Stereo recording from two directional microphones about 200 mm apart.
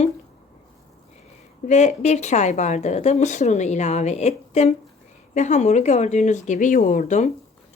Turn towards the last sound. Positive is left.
turn(degrees=40)  # may be behind; listen again after turning